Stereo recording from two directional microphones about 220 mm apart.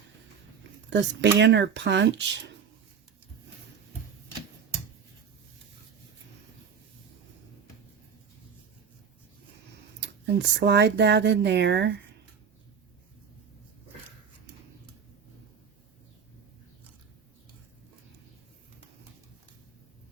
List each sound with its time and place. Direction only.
0.9 s speech: 55° right (ahead or behind)
10.0 s speech: 50° right (ahead or behind)